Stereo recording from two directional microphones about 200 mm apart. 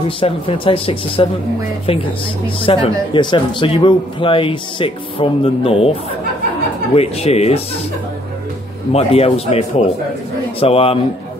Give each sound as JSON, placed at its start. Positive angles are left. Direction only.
{"t": 0.2, "sound": "speech", "side_deg": 25}
{"t": 7.0, "sound": "speech", "side_deg": 30}
{"t": 8.9, "sound": "speech", "side_deg": 30}